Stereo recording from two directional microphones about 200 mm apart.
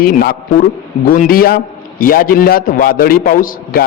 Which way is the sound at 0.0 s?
50° left (ahead or behind).